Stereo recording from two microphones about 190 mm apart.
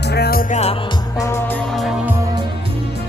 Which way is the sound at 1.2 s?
15° left (ahead or behind).